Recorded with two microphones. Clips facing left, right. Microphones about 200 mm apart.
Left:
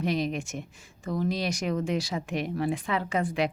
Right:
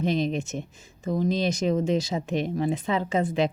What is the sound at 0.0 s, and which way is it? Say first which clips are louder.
Speech: right 3 dB; 25° right (ahead or behind).